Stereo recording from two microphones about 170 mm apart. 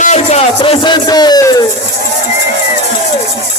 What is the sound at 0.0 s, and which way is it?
Speech, 40° left (ahead or behind).